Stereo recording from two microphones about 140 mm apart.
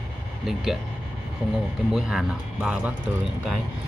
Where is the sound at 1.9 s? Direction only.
5° right (ahead or behind).